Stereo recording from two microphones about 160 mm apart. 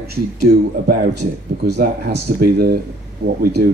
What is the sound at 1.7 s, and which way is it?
Speech, 80° right.